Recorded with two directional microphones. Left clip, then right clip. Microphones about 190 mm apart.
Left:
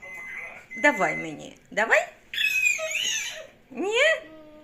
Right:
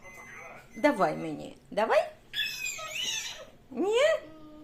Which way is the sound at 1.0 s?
10° right (ahead or behind).